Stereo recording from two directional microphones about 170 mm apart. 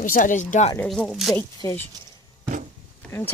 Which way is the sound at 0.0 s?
50° left (ahead or behind).